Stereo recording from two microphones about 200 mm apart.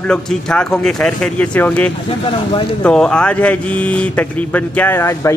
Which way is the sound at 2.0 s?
25° left (ahead or behind).